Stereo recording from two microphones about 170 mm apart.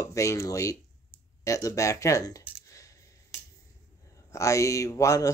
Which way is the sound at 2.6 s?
20° left (ahead or behind).